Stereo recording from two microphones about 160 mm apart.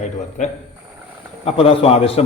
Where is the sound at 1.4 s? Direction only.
40° left (ahead or behind).